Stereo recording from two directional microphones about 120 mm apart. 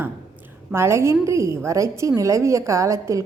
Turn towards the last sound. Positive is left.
turn(degrees=-25)  # may be behind; listen again after turning